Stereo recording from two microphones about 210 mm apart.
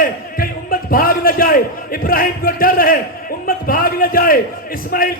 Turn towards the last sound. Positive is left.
turn(degrees=45)  # may be behind; listen again after turning